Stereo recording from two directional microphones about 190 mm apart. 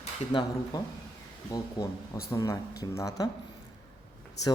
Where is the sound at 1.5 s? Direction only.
20° left (ahead or behind).